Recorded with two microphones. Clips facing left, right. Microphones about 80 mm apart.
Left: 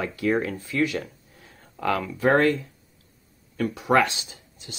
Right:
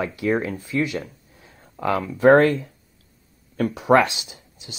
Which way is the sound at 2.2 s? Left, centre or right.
Right.